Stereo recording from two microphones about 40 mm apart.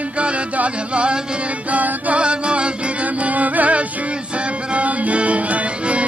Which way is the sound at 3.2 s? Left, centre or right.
Right.